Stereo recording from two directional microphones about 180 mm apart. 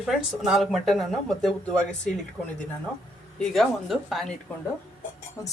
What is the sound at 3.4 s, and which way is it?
Speech, centre (ahead or behind).